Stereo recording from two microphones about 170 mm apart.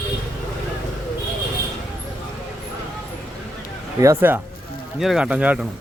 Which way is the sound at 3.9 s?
15° right (ahead or behind).